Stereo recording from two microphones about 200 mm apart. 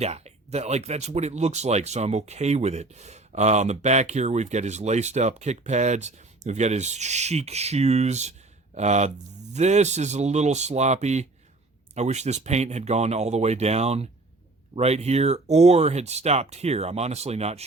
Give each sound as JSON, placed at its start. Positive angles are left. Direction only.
{"t": 0.0, "sound": "speech", "side_deg": -35}